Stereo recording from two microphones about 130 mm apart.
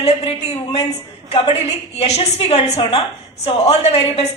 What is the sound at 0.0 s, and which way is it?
Speech, 55° left (ahead or behind).